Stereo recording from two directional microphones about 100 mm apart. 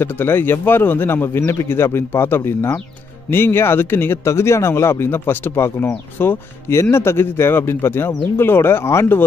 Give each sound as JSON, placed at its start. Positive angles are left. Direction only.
{"t": 0.0, "sound": "speech", "side_deg": 20}